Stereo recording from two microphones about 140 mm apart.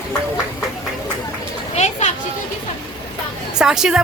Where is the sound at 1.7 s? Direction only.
55° left (ahead or behind).